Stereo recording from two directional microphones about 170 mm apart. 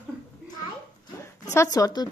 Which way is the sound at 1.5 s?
20° left (ahead or behind).